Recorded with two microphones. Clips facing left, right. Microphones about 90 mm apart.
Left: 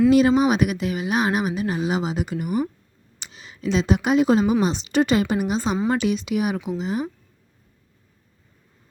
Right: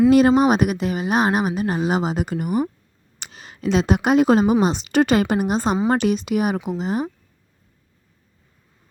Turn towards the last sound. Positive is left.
turn(degrees=-45)  # may be behind; listen again after turning